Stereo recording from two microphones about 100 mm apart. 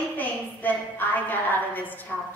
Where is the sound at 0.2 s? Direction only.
20° left (ahead or behind).